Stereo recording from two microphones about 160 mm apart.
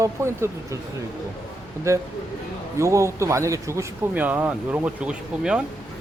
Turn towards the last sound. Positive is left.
turn(degrees=-5)  # may be behind; listen again after turning